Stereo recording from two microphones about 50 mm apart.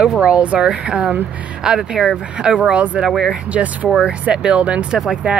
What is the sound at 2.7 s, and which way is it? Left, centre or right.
Speech, right.